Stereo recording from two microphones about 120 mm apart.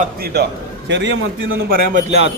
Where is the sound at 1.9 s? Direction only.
65° right (ahead or behind).